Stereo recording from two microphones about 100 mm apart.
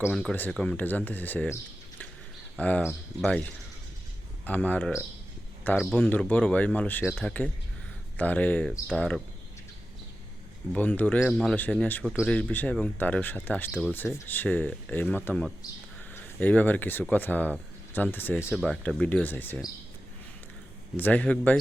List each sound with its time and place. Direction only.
0.1 s speech: 5° left (ahead or behind)
2.6 s speech: 15° left (ahead or behind)
10.7 s speech: 15° left (ahead or behind)
11.3 s speech: 5° left (ahead or behind)
11.5 s speech: 15° left (ahead or behind)
13.7 s speech: 10° right (ahead or behind)
13.9 s speech: 20° left (ahead or behind)
18.6 s speech: 10° left (ahead or behind)
20.9 s speech: 15° left (ahead or behind)